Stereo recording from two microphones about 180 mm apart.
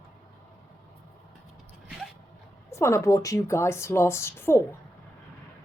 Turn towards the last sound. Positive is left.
turn(degrees=15)  # may be behind; listen again after turning